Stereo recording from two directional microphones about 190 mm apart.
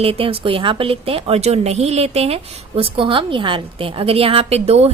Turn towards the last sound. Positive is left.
turn(degrees=-35)  # may be behind; listen again after turning